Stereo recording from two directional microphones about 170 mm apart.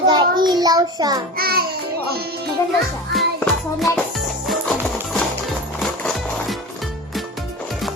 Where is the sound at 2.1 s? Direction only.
70° right (ahead or behind).